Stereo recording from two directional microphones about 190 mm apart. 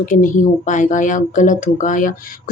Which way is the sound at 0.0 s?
45° left (ahead or behind).